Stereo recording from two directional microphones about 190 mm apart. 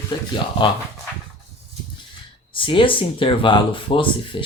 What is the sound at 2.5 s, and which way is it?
Speech, 25° left (ahead or behind).